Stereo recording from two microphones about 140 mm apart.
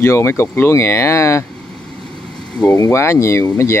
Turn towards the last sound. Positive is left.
turn(degrees=20)  # may be behind; listen again after turning